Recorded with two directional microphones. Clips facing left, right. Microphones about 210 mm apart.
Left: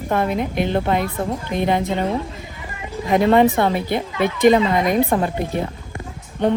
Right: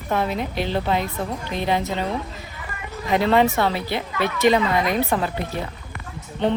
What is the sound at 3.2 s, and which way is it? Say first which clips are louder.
A woman's voice: left 4 dB; 15° left (ahead or behind).